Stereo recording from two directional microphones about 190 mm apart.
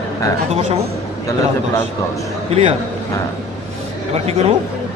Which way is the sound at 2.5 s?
35° right (ahead or behind).